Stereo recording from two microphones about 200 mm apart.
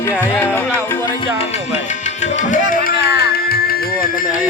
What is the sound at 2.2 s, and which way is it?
Music, 35° left (ahead or behind).